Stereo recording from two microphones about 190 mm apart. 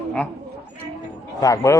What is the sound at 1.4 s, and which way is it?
Speech, 20° left (ahead or behind).